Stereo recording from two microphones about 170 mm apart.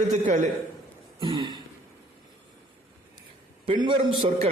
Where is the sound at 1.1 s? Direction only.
30° right (ahead or behind).